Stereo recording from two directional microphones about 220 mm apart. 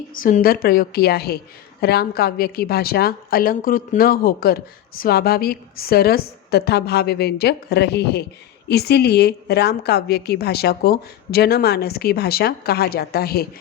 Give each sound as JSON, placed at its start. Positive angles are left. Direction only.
{"t": 0.1, "sound": "a woman's voice", "side_deg": 40}